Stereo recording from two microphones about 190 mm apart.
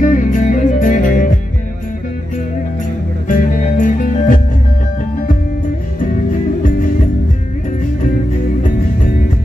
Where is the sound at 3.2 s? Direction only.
45° left (ahead or behind).